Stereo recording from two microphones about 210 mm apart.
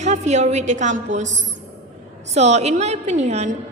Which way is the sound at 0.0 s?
35° right (ahead or behind).